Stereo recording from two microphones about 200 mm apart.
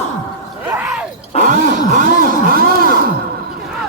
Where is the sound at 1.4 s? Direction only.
40° right (ahead or behind).